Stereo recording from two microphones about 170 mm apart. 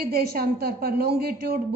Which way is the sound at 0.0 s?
65° right (ahead or behind).